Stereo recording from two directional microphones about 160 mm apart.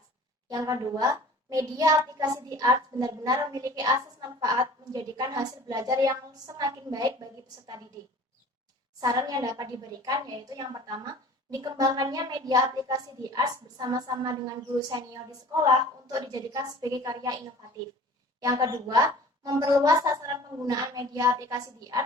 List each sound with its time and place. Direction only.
0.4 s a child's voice: 20° right (ahead or behind)
9.0 s a child's voice: 25° right (ahead or behind)